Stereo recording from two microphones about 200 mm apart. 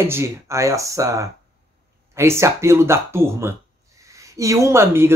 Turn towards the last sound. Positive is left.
turn(degrees=-10)  # may be behind; listen again after turning